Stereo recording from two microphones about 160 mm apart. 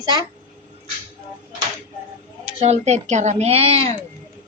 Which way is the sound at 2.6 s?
40° right (ahead or behind).